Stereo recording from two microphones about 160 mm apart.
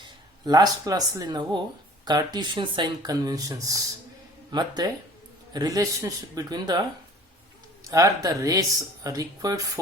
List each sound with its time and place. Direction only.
0.0 s speech: 25° right (ahead or behind)
7.9 s speech: 20° right (ahead or behind)